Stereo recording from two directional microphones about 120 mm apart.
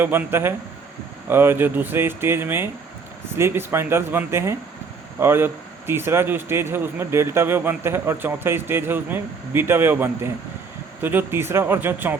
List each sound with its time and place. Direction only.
0.0 s speech: 20° right (ahead or behind)